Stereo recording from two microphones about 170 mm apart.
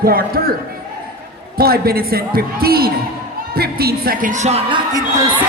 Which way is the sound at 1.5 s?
65° right (ahead or behind).